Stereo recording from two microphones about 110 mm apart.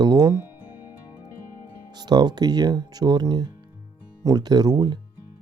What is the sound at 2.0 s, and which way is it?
Speech, 40° right (ahead or behind).